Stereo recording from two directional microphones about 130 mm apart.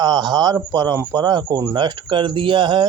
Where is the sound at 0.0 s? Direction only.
30° right (ahead or behind).